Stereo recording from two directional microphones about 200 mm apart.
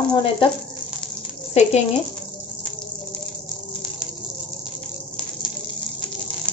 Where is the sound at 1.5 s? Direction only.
30° left (ahead or behind).